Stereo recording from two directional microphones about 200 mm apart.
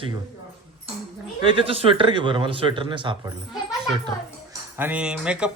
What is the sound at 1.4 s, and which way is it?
Speech, 25° right (ahead or behind).